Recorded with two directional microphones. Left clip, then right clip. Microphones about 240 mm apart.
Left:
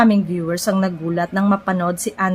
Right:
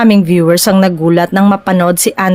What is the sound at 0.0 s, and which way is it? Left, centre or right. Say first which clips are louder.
Speech: right 8 dB; right.